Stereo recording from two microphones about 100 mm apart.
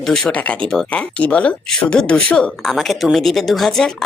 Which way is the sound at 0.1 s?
10° left (ahead or behind).